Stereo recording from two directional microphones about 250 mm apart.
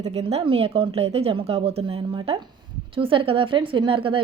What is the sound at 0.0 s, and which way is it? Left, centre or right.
A woman's voice, right.